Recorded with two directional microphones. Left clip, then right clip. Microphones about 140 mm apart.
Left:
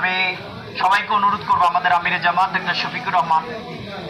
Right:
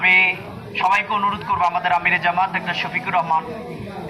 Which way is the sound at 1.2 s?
15° left (ahead or behind).